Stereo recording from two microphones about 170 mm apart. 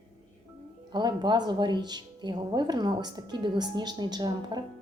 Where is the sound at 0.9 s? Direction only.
25° right (ahead or behind).